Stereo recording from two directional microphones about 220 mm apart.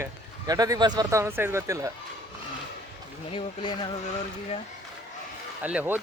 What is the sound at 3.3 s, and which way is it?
Speech, 20° left (ahead or behind).